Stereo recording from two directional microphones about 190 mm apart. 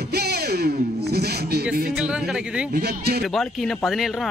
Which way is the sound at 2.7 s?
60° right (ahead or behind).